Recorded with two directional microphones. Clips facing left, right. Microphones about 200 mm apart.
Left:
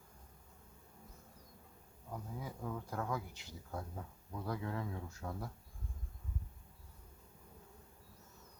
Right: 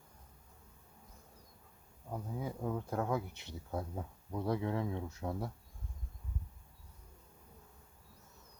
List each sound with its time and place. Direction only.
2.1 s speech: 25° right (ahead or behind)